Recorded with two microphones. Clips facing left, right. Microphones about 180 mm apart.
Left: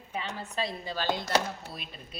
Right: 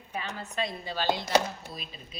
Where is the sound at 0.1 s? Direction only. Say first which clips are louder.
Even; 30° left (ahead or behind).